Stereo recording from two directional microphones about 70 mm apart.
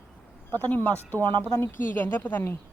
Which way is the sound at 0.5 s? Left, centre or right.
Left.